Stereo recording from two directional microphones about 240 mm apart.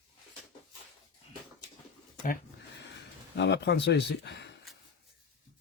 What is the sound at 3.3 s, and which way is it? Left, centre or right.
Speech, left.